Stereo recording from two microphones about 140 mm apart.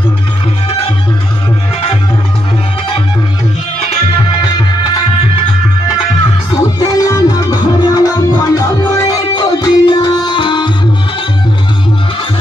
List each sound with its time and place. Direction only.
6.8 s music: 25° left (ahead or behind)